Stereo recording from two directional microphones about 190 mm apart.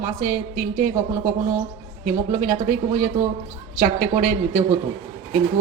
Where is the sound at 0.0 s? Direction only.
45° right (ahead or behind).